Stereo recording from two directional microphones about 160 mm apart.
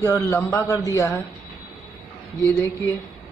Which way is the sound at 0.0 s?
15° left (ahead or behind).